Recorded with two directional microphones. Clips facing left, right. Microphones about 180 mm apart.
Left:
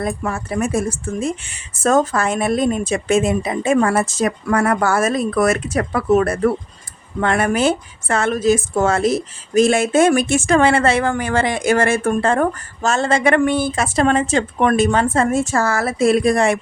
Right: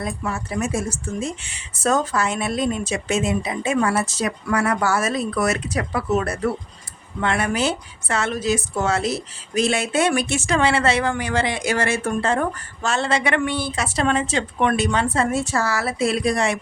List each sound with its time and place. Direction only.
0.0 s a woman's voice: 50° left (ahead or behind)